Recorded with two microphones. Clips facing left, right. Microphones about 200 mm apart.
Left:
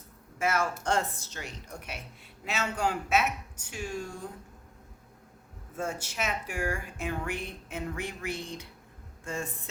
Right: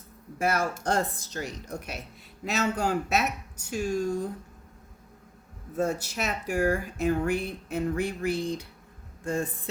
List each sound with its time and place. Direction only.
0.3 s speech: 35° right (ahead or behind)
5.7 s speech: 40° right (ahead or behind)